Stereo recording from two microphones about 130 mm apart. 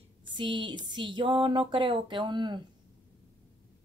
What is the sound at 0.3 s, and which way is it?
Speech, 40° right (ahead or behind).